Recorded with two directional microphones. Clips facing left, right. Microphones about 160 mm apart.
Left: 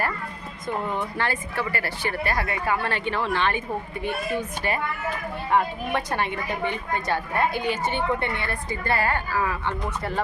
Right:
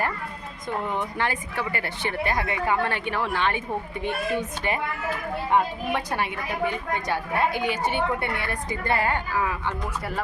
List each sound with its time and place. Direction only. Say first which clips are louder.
0.9 s a woman's voice: even; 15° right (ahead or behind)